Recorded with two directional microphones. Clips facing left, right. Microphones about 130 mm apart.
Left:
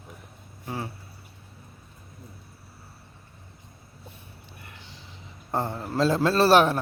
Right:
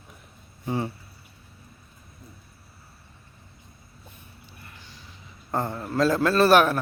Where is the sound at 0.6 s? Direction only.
Centre (ahead or behind).